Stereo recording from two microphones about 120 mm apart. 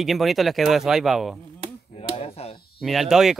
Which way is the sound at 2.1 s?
60° left (ahead or behind).